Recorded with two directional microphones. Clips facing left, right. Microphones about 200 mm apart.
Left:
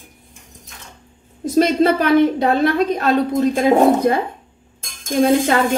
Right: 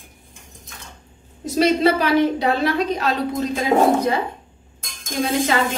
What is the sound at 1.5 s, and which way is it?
A woman's voice, 50° left (ahead or behind).